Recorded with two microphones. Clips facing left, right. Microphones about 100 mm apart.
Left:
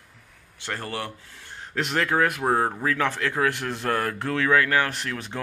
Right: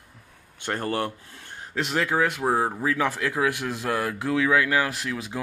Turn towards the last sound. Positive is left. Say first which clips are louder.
# right 1 dB
turn(degrees=-5)  # may be behind; listen again after turning